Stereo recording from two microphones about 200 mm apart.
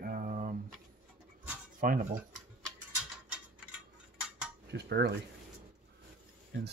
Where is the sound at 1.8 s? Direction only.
40° right (ahead or behind).